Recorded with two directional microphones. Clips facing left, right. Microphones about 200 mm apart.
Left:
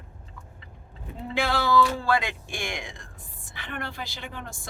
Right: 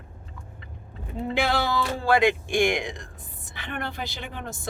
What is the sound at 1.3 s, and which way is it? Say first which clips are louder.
Speech: left 2 dB; 20° right (ahead or behind).